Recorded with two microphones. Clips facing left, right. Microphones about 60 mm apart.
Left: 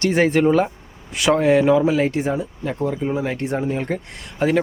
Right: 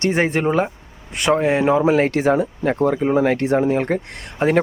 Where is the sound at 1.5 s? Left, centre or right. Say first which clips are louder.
Even; right.